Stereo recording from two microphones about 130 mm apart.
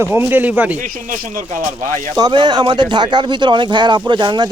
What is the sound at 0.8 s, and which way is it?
Speech, 90° right.